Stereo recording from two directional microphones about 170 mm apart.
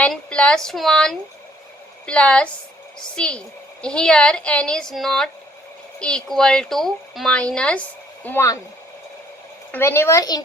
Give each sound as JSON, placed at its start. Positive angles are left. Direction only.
{"t": 0.0, "sound": "a woman's voice", "side_deg": 5}
{"t": 9.7, "sound": "speech", "side_deg": 15}